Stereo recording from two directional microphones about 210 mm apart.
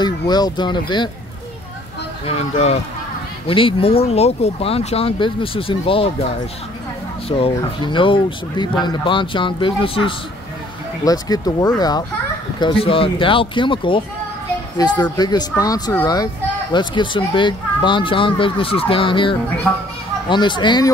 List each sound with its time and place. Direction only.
0.0 s speech: 20° left (ahead or behind)
2.2 s speech: 30° left (ahead or behind)
7.2 s speech: 25° left (ahead or behind)